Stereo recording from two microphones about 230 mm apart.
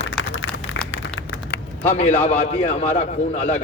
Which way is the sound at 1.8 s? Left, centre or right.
Left.